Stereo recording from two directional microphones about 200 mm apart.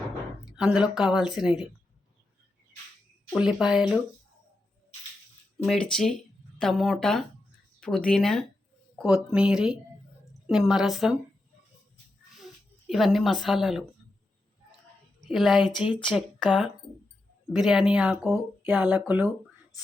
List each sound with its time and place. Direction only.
0.5 s a woman's voice: 5° right (ahead or behind)
3.3 s a woman's voice: 5° right (ahead or behind)
5.6 s a woman's voice: 5° left (ahead or behind)
12.9 s a woman's voice: centre (ahead or behind)
15.2 s a woman's voice: centre (ahead or behind)
15.9 s speech: 25° left (ahead or behind)
16.5 s a woman's voice: 5° right (ahead or behind)